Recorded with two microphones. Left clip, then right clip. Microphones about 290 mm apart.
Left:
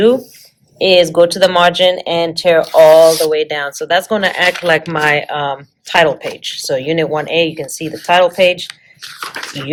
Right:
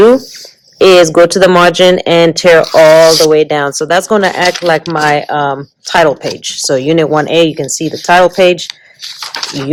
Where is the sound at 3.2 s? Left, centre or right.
Centre.